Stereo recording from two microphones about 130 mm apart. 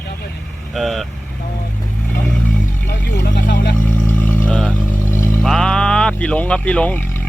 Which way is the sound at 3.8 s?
10° left (ahead or behind).